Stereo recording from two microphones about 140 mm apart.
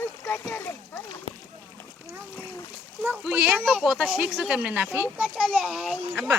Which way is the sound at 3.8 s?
Centre (ahead or behind).